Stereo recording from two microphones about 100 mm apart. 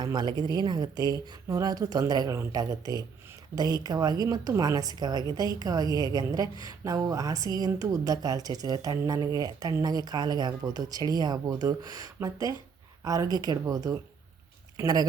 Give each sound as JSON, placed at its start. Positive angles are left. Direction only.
{"t": 0.0, "sound": "speech", "side_deg": -45}